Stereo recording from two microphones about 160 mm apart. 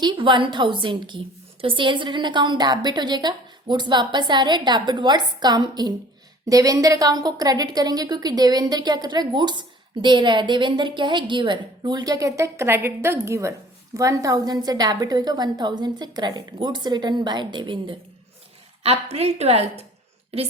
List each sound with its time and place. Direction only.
0.0 s a woman's voice: 30° right (ahead or behind)
19.1 s a woman's voice: 40° right (ahead or behind)